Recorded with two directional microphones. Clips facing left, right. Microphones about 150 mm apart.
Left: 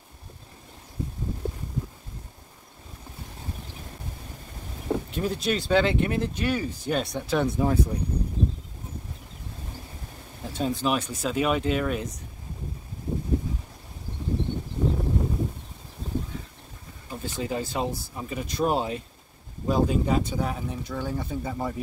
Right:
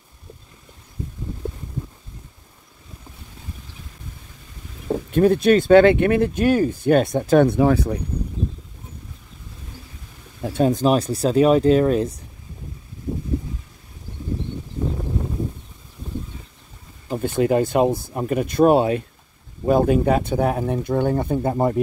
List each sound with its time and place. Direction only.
5.1 s speech: 55° right (ahead or behind)
10.4 s speech: 55° right (ahead or behind); by 12.2 s 35° right (ahead or behind)
17.1 s speech: 60° right (ahead or behind)